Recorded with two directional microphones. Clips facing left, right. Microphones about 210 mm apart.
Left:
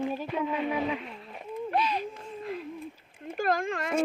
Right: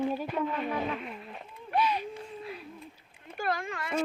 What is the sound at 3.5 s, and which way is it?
Speech, 45° left (ahead or behind).